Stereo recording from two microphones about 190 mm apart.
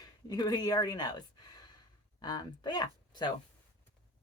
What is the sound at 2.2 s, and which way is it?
Speech, 20° left (ahead or behind).